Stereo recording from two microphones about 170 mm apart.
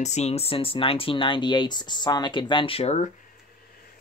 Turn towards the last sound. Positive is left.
turn(degrees=40)  # may be behind; listen again after turning